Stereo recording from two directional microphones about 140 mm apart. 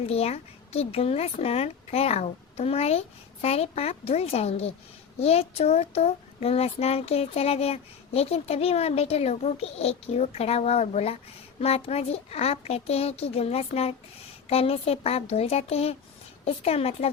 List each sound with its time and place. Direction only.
0.0 s speech: 45° left (ahead or behind)